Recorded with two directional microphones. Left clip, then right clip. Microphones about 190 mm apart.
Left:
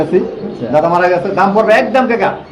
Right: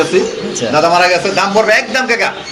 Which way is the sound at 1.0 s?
25° left (ahead or behind).